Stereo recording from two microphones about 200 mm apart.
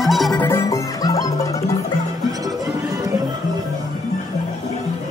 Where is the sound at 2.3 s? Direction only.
20° right (ahead or behind).